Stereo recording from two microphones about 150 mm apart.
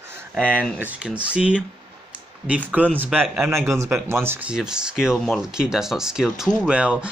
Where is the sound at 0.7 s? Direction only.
10° right (ahead or behind).